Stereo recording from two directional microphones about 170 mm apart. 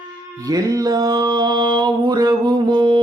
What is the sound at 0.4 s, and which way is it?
Music, 20° right (ahead or behind).